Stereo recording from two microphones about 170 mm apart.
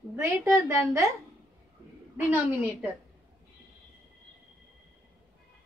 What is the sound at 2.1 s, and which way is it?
Speech, 10° right (ahead or behind).